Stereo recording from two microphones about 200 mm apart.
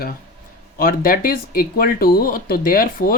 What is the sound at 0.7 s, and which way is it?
Speech, 45° left (ahead or behind).